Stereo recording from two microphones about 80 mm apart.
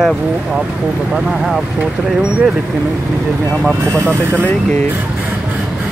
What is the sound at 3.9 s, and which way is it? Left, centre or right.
Speech, right.